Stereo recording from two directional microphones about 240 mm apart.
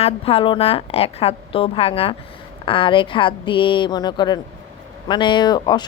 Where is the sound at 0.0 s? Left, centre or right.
Left.